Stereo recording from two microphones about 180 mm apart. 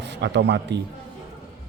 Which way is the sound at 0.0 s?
70° right (ahead or behind).